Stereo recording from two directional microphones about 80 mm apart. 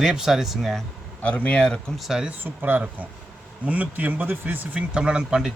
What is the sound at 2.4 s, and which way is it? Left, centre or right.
Speech, right.